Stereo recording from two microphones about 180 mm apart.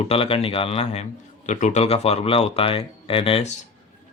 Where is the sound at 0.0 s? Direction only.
30° left (ahead or behind).